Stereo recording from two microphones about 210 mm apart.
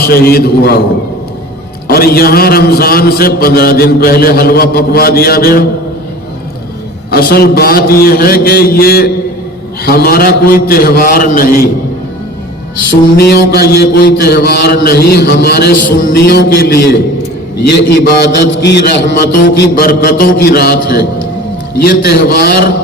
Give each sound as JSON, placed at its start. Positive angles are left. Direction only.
{"t": 0.0, "sound": "mantra", "side_deg": 45}
{"t": 1.9, "sound": "mantra", "side_deg": 45}
{"t": 7.1, "sound": "mantra", "side_deg": 45}
{"t": 12.9, "sound": "mantra", "side_deg": 50}